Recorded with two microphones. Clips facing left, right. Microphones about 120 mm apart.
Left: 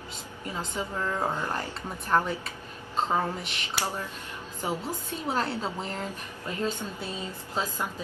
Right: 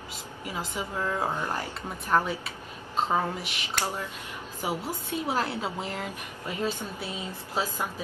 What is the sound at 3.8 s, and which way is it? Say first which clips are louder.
Speech: even; 10° left (ahead or behind).